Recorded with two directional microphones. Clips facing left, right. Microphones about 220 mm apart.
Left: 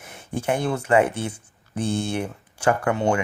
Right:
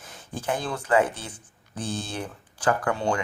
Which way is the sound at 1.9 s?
25° left (ahead or behind).